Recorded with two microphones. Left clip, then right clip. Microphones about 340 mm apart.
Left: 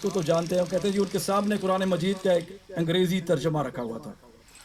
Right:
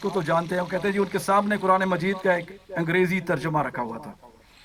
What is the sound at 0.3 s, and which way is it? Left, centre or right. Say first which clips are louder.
Speech: left 1 dB; right.